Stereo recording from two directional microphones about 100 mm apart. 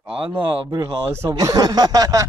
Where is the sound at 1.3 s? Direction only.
40° right (ahead or behind).